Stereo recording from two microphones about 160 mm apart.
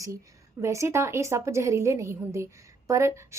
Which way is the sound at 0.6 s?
20° right (ahead or behind).